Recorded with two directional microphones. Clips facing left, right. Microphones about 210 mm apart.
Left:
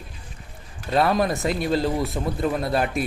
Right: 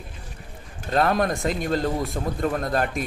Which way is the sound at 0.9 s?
5° left (ahead or behind).